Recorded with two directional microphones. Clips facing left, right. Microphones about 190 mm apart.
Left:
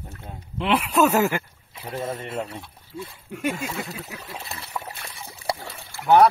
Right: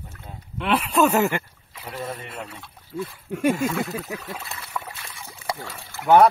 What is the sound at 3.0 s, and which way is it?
Speech, 55° right (ahead or behind).